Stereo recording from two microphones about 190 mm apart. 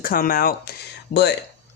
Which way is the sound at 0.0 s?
50° left (ahead or behind).